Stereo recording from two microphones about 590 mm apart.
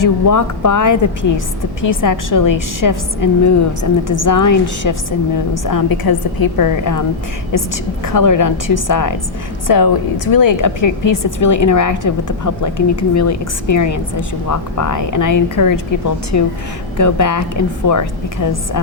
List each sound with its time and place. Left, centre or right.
0.0 s a woman's voice: left